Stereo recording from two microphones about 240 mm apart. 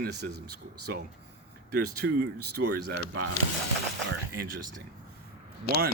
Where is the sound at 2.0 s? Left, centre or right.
Right.